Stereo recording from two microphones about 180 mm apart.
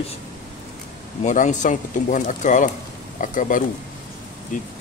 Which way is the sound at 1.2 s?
45° left (ahead or behind).